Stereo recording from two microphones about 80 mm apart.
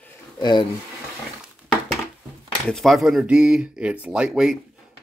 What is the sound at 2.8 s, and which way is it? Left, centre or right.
Speech, centre.